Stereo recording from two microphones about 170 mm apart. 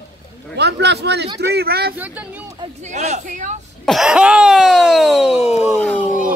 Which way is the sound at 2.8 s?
40° right (ahead or behind).